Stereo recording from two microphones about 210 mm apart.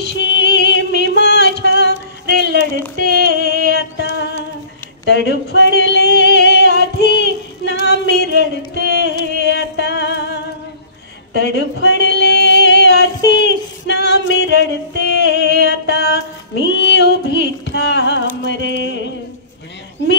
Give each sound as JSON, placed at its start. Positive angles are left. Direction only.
{"t": 0.0, "sound": "music", "side_deg": 55}
{"t": 3.2, "sound": "a sound", "side_deg": 50}
{"t": 4.0, "sound": "music", "side_deg": 55}
{"t": 5.0, "sound": "female singing", "side_deg": 55}
{"t": 8.7, "sound": "music", "side_deg": 55}
{"t": 11.3, "sound": "female singing", "side_deg": 50}
{"t": 16.6, "sound": "a sound", "side_deg": 55}